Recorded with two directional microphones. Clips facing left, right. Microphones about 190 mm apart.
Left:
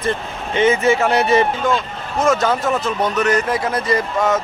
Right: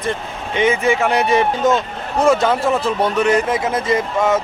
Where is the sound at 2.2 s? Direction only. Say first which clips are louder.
Right 2 dB; 30° right (ahead or behind).